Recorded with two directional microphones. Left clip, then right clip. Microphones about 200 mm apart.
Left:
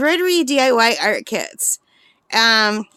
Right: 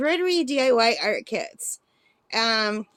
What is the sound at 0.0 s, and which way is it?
A woman's voice, 30° left (ahead or behind).